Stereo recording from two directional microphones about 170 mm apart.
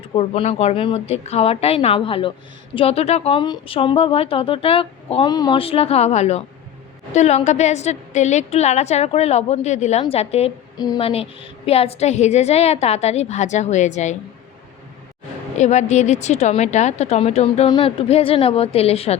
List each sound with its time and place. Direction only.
0.2 s speech: 35° left (ahead or behind)
10.8 s speech: 25° left (ahead or behind)
11.0 s speech: 35° left (ahead or behind)
15.5 s speech: 45° left (ahead or behind)